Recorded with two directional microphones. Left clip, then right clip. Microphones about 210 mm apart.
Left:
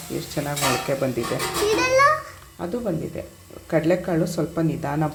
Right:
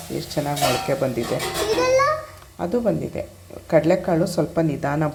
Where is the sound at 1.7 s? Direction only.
40° left (ahead or behind).